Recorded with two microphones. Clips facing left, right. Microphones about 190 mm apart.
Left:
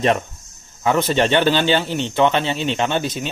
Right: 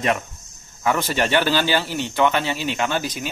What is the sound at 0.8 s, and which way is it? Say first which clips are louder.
A man's voice: left 4 dB; 25° left (ahead or behind).